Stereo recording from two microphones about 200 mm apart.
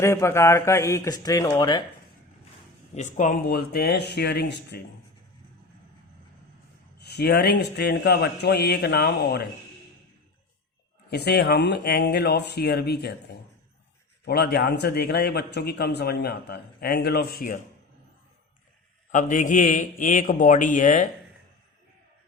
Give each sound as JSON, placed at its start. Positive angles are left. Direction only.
{"t": 0.0, "sound": "speech", "side_deg": 15}
{"t": 2.9, "sound": "speech", "side_deg": 40}
{"t": 7.0, "sound": "speech", "side_deg": 55}
{"t": 11.1, "sound": "speech", "side_deg": 55}
{"t": 14.3, "sound": "speech", "side_deg": 50}
{"t": 19.1, "sound": "a man's voice", "side_deg": 40}